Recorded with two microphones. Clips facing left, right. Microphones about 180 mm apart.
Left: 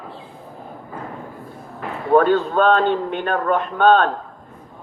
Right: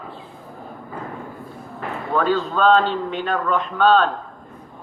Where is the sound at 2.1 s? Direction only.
55° left (ahead or behind).